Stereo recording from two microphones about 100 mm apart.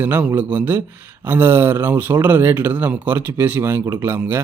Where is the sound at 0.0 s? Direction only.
20° right (ahead or behind).